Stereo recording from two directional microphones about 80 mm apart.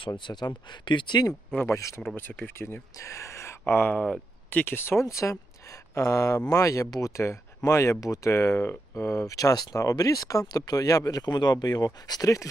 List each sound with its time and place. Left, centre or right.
0.0 s speech: left
1.7 s speech: left
2.1 s speech: left
3.9 s speech: centre
5.0 s speech: left